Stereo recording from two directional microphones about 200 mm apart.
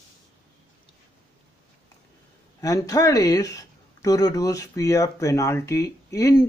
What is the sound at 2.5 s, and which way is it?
Speech, 15° left (ahead or behind).